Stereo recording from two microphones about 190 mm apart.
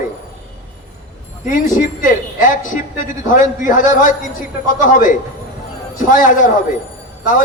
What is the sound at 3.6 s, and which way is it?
A man's voice, 45° left (ahead or behind).